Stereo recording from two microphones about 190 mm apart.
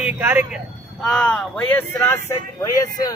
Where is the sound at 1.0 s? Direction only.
5° left (ahead or behind).